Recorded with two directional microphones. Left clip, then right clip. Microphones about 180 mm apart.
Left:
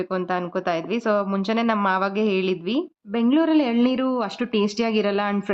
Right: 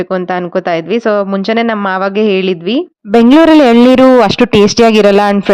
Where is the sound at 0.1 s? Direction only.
35° right (ahead or behind).